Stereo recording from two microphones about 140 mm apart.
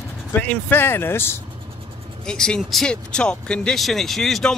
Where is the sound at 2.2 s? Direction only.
5° left (ahead or behind).